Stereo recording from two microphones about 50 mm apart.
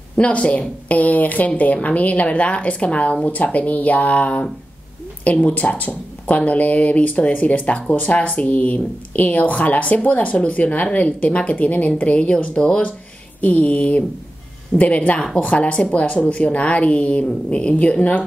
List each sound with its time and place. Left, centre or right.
0.2 s a woman's voice: left